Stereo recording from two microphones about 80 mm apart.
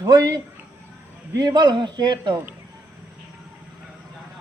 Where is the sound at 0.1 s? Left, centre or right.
Right.